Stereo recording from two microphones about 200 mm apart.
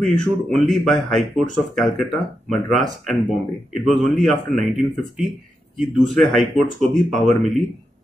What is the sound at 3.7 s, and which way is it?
Speech, centre (ahead or behind).